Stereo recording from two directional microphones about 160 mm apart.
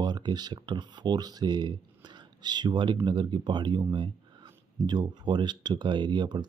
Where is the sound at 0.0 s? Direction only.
25° right (ahead or behind).